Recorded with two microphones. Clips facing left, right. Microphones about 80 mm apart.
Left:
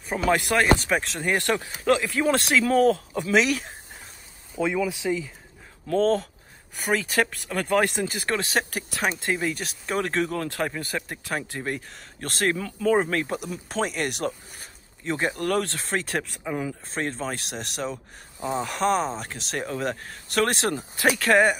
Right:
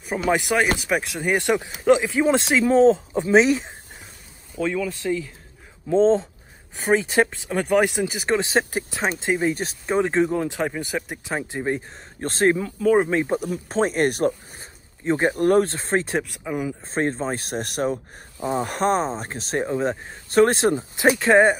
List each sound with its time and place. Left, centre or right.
0.0 s speech: centre
4.6 s speech: centre
5.9 s speech: right
12.5 s speech: centre
13.1 s speech: centre
13.4 s speech: right
16.3 s speech: centre
16.8 s speech: right
19.6 s speech: right